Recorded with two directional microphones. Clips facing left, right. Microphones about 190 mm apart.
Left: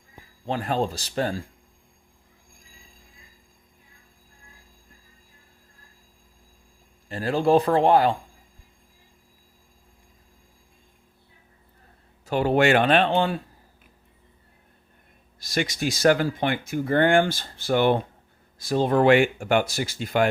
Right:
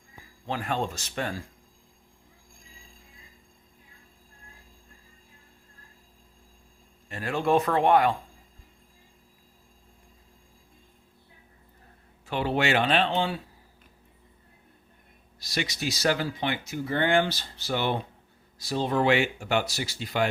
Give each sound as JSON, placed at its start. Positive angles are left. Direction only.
{"t": 0.4, "sound": "a man's voice", "side_deg": 35}
{"t": 7.1, "sound": "a man's voice", "side_deg": 35}
{"t": 12.2, "sound": "speech", "side_deg": 45}
{"t": 15.4, "sound": "speech", "side_deg": 50}